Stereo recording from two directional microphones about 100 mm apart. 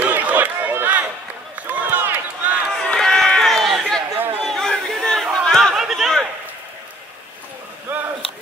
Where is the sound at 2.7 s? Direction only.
5° left (ahead or behind).